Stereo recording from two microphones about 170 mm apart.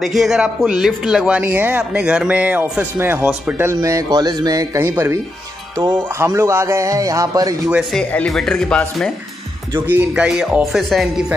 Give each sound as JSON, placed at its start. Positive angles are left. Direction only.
{"t": 0.0, "sound": "speech", "side_deg": 0}
{"t": 7.9, "sound": "speech", "side_deg": 5}
{"t": 9.8, "sound": "speech", "side_deg": -10}